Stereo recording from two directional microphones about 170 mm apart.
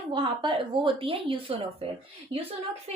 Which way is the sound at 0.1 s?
30° right (ahead or behind).